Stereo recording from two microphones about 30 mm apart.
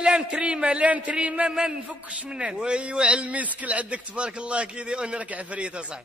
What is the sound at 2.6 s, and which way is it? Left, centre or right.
Speech, right.